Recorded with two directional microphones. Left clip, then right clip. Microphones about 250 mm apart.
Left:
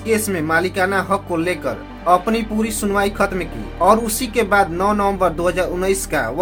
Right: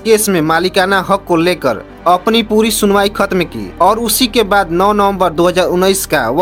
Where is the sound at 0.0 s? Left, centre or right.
Right.